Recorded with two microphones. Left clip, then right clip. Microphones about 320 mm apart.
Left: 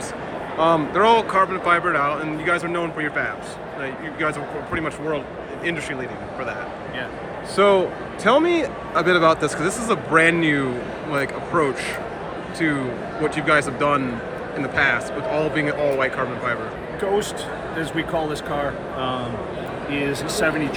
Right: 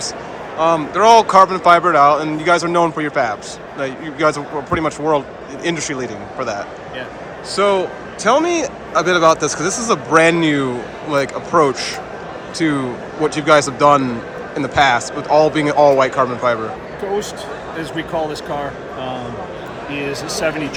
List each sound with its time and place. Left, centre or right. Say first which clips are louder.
0.6 s a man's voice: right 4 dB; centre
7.5 s a man's voice: right 1 dB; centre
17.9 s a man's voice: right 4 dB; centre